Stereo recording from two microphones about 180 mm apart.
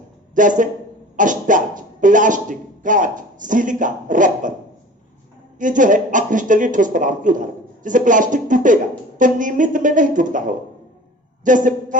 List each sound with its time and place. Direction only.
0.3 s speech: 45° right (ahead or behind)
5.5 s speech: 45° right (ahead or behind)